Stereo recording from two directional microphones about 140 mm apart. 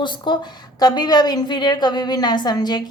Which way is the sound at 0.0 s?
35° left (ahead or behind).